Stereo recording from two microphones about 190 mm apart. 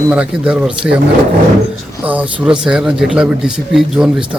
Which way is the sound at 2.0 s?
5° right (ahead or behind).